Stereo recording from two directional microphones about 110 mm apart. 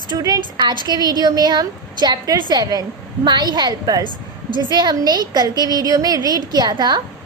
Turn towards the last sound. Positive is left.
turn(degrees=-40)  # may be behind; listen again after turning